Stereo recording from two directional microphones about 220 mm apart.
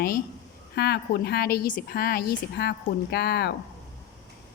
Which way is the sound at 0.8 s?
45° left (ahead or behind).